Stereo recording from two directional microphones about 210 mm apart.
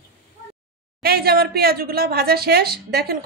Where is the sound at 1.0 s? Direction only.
45° right (ahead or behind).